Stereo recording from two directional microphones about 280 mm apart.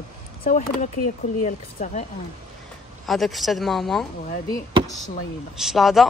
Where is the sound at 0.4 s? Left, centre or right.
Left.